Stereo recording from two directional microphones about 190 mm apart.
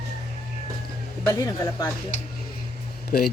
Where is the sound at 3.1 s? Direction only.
55° left (ahead or behind).